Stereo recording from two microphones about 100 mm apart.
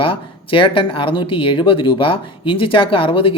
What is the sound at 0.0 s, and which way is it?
Speech, 60° left (ahead or behind).